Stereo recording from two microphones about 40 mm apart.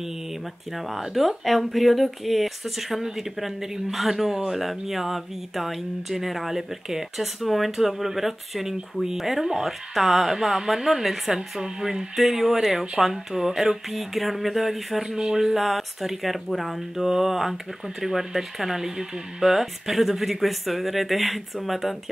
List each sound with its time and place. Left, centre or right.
0.7 s speech: centre
15.0 s speech: centre
15.3 s speech: centre